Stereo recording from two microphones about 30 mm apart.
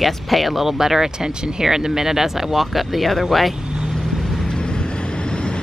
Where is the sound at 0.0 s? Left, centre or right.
Centre.